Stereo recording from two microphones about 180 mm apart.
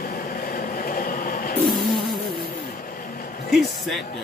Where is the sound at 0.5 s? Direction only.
55° left (ahead or behind).